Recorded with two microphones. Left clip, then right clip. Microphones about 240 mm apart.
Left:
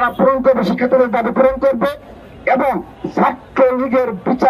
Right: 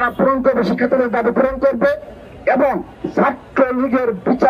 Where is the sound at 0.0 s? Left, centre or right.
Left.